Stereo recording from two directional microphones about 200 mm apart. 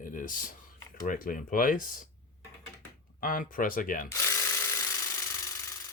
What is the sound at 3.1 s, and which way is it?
Speech, 40° left (ahead or behind).